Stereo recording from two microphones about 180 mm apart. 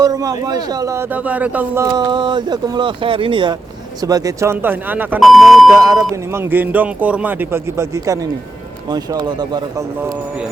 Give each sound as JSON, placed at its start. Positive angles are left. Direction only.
{"t": 0.0, "sound": "speech", "side_deg": -20}
{"t": 1.9, "sound": "speech", "side_deg": -25}
{"t": 5.7, "sound": "speech", "side_deg": -15}